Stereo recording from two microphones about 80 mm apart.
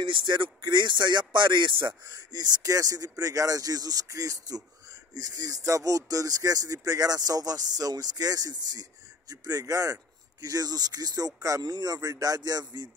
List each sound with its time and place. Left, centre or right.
0.0 s speech: right
2.6 s speech: right